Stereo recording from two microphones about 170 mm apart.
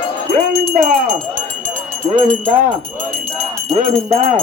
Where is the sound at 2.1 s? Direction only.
35° right (ahead or behind).